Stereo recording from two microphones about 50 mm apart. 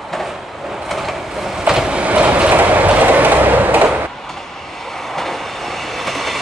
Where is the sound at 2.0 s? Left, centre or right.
Right.